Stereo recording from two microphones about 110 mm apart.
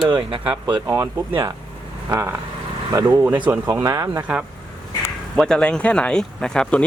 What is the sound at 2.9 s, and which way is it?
Speech, 30° right (ahead or behind).